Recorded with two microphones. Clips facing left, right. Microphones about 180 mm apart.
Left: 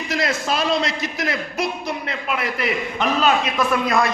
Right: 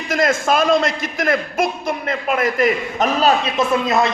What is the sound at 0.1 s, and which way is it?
A man's voice, 50° right (ahead or behind).